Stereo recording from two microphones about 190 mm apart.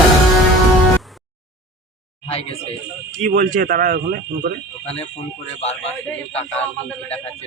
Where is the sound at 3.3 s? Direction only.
50° right (ahead or behind).